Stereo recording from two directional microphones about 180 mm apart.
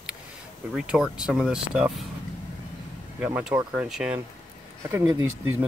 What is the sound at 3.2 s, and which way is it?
Speech, 10° right (ahead or behind).